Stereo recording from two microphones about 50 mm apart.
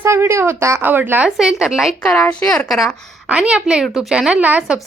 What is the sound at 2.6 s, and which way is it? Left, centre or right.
Speech, centre.